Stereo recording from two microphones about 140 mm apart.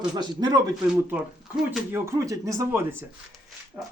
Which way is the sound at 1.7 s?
15° right (ahead or behind).